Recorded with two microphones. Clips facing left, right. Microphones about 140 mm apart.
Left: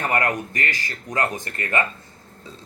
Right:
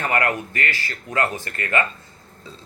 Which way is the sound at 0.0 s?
25° left (ahead or behind).